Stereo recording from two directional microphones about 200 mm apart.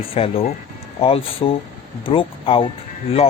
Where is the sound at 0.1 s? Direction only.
30° left (ahead or behind).